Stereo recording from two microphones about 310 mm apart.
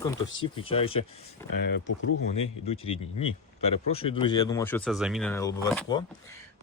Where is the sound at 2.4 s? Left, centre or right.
Centre.